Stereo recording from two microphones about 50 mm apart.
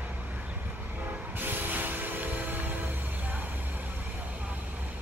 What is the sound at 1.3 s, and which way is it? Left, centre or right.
Train, right.